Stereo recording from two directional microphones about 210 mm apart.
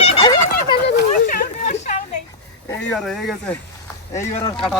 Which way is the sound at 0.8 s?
40° left (ahead or behind).